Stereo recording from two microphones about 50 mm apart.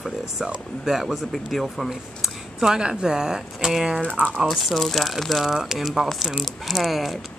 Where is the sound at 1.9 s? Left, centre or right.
Centre.